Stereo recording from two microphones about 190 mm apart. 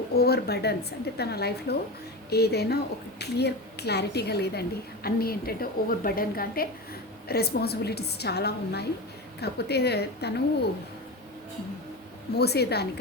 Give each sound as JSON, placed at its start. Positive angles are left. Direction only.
{"t": 0.1, "sound": "a woman's voice", "side_deg": 55}
{"t": 12.3, "sound": "a woman's voice", "side_deg": 60}